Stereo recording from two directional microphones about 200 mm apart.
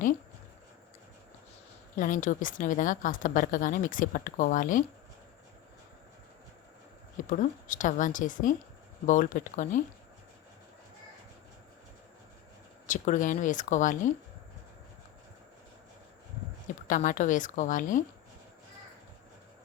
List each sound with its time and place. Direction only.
2.0 s a woman's voice: 40° left (ahead or behind)
7.3 s a woman's voice: 40° left (ahead or behind)
12.9 s a woman's voice: 40° left (ahead or behind)
16.8 s a woman's voice: 40° left (ahead or behind)